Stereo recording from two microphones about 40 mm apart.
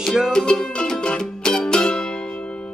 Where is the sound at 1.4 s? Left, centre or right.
Centre.